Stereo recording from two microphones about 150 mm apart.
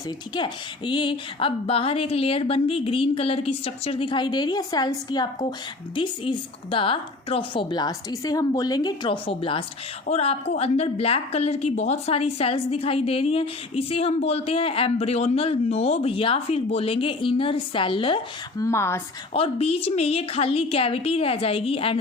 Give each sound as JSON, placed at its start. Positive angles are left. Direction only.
{"t": 0.3, "sound": "a woman's voice", "side_deg": 30}
{"t": 18.6, "sound": "a woman's voice", "side_deg": 15}
{"t": 19.3, "sound": "a woman's voice", "side_deg": 40}